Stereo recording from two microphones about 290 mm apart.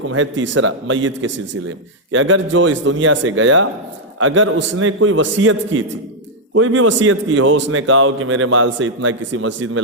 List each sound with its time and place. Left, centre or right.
0.1 s a man's voice: right